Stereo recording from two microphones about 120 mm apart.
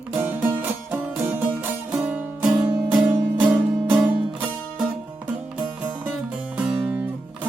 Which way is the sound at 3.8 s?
15° right (ahead or behind).